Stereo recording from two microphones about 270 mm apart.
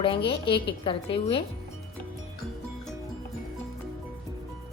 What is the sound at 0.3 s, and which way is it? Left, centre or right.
Speech, centre.